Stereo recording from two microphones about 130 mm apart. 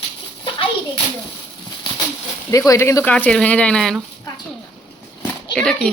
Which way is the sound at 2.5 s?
25° left (ahead or behind).